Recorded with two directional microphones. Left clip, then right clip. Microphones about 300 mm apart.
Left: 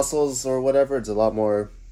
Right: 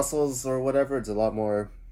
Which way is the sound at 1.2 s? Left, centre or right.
Centre.